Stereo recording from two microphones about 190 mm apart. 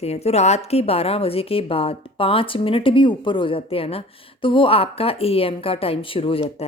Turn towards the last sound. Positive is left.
turn(degrees=30)  # may be behind; listen again after turning